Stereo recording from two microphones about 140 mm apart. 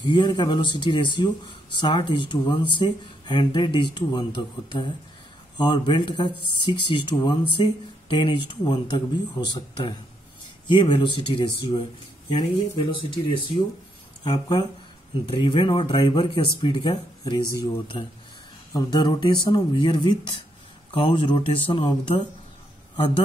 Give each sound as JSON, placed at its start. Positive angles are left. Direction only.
{"t": 0.1, "sound": "speech", "side_deg": 35}